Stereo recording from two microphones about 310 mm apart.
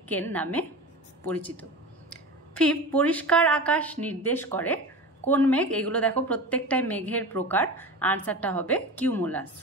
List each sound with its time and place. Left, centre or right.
0.1 s a woman's voice: centre